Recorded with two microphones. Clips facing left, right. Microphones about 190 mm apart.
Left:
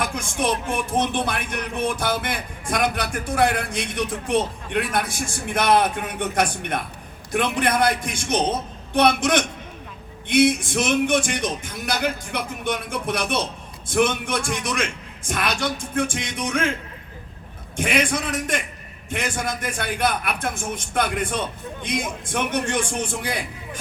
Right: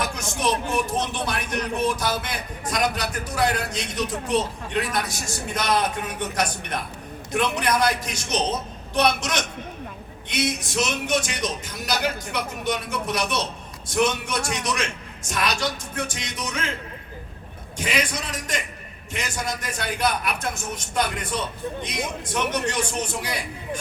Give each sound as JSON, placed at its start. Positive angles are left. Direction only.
{"t": 0.0, "sound": "a man's voice", "side_deg": 55}
{"t": 17.7, "sound": "a man's voice", "side_deg": 55}